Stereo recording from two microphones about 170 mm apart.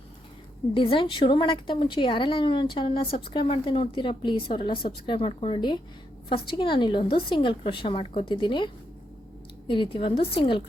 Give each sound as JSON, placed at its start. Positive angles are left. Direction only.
{"t": 0.7, "sound": "a woman's voice", "side_deg": 30}